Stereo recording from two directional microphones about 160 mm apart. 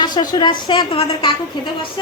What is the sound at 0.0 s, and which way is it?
A woman's voice, 25° left (ahead or behind).